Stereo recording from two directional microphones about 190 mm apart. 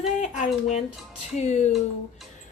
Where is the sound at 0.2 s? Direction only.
40° left (ahead or behind).